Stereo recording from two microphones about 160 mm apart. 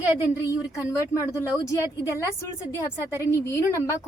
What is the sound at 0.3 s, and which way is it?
A woman's voice, 20° left (ahead or behind).